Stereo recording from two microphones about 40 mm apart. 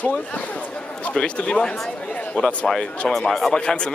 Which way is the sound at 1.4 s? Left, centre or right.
Left.